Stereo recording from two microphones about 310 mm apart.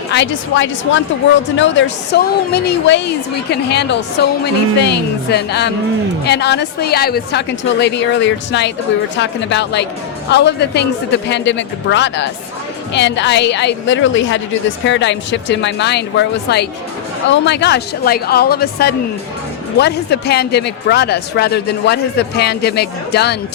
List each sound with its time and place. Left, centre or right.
0.1 s a man's voice: left